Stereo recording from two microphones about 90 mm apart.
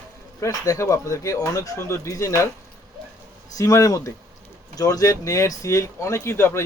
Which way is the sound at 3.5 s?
35° left (ahead or behind).